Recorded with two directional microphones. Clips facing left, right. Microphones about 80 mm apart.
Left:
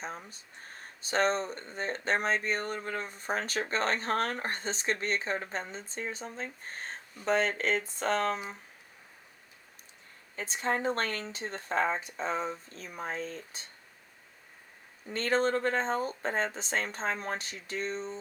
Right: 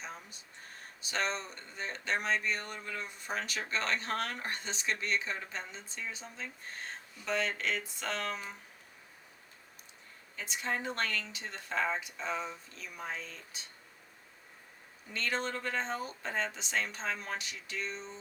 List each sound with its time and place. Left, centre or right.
0.0 s speech: left
10.3 s speech: left
15.1 s speech: left